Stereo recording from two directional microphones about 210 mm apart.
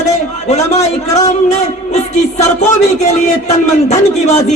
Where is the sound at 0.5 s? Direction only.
35° left (ahead or behind).